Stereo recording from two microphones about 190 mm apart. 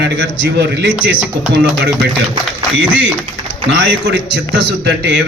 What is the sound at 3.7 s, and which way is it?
A man's voice, 65° right (ahead or behind).